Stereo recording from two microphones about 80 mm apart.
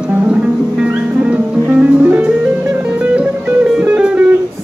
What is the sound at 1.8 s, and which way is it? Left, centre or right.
Music, centre.